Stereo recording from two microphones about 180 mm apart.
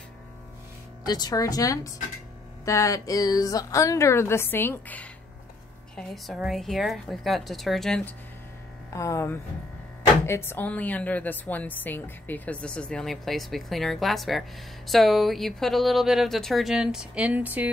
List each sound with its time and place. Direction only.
1.0 s a woman's voice: 20° left (ahead or behind); by 8.1 s 5° left (ahead or behind)
8.9 s a woman's voice: 15° left (ahead or behind); by 17.6 s 10° right (ahead or behind)